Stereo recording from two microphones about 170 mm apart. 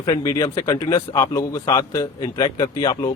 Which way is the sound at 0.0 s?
20° left (ahead or behind).